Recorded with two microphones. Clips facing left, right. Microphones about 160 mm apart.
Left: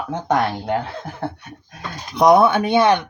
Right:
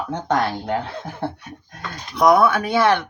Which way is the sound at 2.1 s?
20° left (ahead or behind).